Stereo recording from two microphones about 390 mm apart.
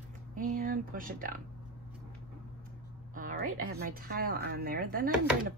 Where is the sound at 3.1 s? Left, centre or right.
Right.